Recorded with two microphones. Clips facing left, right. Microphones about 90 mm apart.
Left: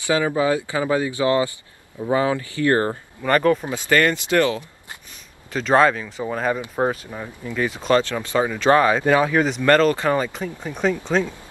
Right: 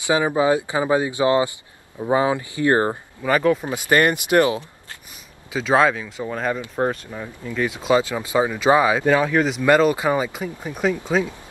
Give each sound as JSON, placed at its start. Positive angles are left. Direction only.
{"t": 0.0, "sound": "speech", "side_deg": -20}
{"t": 3.2, "sound": "speech", "side_deg": -5}
{"t": 3.6, "sound": "speech", "side_deg": -15}
{"t": 5.5, "sound": "speech", "side_deg": -5}